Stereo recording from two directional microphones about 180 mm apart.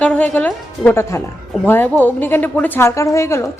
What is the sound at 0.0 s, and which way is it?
A woman's voice, 5° left (ahead or behind).